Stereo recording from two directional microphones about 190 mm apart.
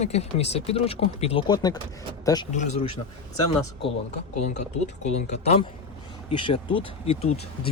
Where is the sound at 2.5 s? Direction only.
40° left (ahead or behind).